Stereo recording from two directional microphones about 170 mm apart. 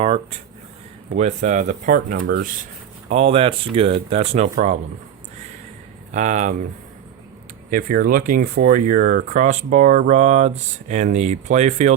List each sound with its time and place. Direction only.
0.0 s speech: 35° right (ahead or behind); by 2.2 s 50° right (ahead or behind)
3.1 s speech: 35° right (ahead or behind)
6.1 s speech: 45° right (ahead or behind)
7.7 s speech: 55° right (ahead or behind)